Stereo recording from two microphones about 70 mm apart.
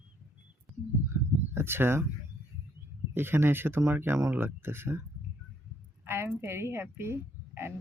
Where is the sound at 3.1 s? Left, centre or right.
Right.